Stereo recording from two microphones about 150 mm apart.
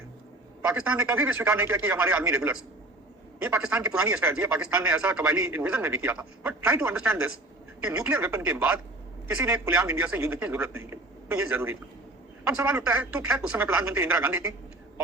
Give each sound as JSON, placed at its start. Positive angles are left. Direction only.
{"t": 0.7, "sound": "speech", "side_deg": -10}
{"t": 12.9, "sound": "speech", "side_deg": -10}